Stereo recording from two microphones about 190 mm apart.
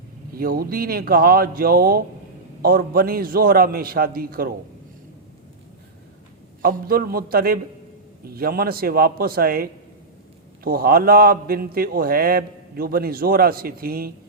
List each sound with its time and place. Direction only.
0.3 s a man's voice: 50° right (ahead or behind)
6.6 s a man's voice: 50° right (ahead or behind)